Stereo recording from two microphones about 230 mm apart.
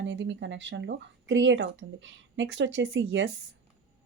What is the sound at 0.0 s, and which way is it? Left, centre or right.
Speech, right.